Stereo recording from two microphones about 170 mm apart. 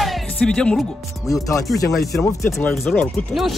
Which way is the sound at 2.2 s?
20° left (ahead or behind).